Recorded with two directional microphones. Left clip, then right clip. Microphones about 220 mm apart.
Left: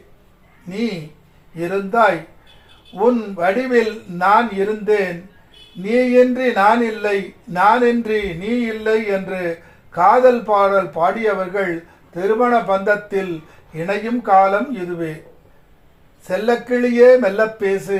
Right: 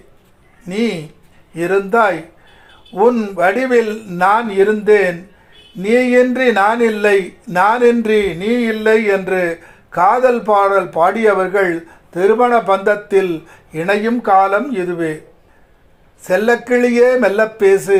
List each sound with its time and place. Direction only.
1.5 s a man's voice: 50° right (ahead or behind)
16.2 s a man's voice: 45° right (ahead or behind)